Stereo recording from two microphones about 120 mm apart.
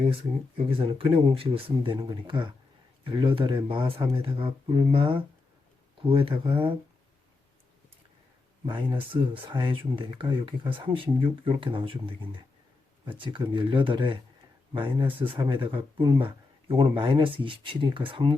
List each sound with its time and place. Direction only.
0.0 s speech: 50° right (ahead or behind)
8.6 s speech: 40° right (ahead or behind)